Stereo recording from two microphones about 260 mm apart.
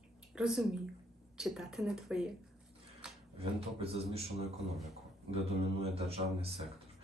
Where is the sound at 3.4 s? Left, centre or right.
Right.